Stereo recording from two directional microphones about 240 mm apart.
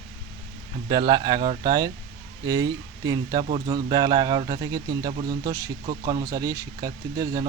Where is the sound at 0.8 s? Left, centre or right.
Centre.